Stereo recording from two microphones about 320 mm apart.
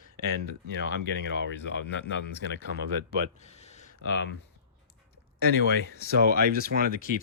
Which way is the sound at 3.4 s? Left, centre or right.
Centre.